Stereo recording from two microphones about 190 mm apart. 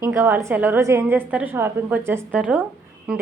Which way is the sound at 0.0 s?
15° right (ahead or behind).